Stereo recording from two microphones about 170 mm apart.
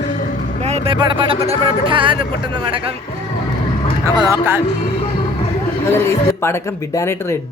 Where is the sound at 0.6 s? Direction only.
40° right (ahead or behind).